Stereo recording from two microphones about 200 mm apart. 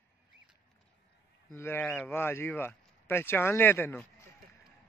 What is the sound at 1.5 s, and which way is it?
Speech, 10° left (ahead or behind).